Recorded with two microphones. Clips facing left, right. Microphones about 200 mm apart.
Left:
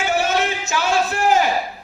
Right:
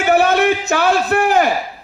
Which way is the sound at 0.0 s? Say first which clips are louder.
Right 7 dB; 60° right (ahead or behind).